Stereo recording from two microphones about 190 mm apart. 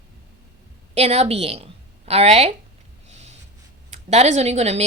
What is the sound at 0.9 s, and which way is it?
A woman's voice, 35° right (ahead or behind).